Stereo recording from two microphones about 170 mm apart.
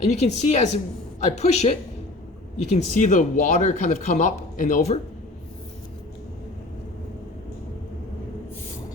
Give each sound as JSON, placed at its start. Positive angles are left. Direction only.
{"t": 0.0, "sound": "speech", "side_deg": 40}